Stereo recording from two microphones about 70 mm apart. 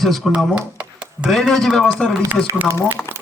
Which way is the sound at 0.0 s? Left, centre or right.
Centre.